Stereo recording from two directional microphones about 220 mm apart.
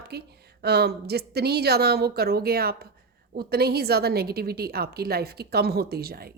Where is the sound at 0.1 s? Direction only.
45° right (ahead or behind).